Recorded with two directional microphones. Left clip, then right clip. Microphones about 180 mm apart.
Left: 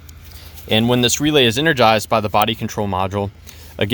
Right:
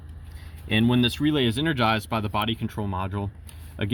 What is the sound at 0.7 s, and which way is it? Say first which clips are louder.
Speech: left 8 dB; 40° left (ahead or behind).